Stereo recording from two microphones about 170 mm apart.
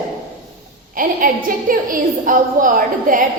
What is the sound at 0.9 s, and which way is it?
A woman's voice, 55° right (ahead or behind).